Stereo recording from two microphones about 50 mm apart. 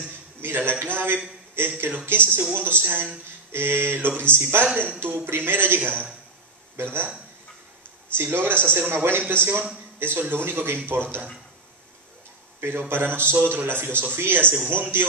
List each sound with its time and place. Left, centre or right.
0.4 s a man's voice: right
8.2 s a man's voice: right
12.5 s a man's voice: right